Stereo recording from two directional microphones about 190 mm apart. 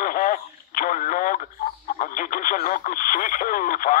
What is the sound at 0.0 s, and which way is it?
Speech, 45° left (ahead or behind).